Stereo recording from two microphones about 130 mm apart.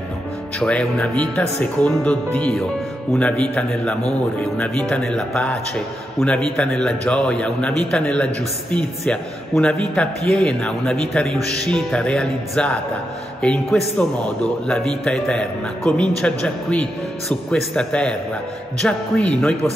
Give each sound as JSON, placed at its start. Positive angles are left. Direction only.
{"t": 0.6, "sound": "speech", "side_deg": 10}